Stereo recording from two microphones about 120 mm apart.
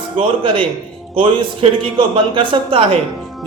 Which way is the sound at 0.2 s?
50° right (ahead or behind).